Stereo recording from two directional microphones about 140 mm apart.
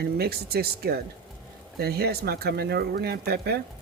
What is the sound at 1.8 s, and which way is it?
Speech, 90° right.